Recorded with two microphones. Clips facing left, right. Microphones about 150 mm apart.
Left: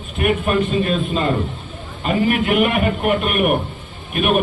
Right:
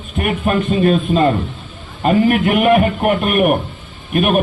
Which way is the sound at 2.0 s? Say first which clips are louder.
Right 5 dB; 50° right (ahead or behind).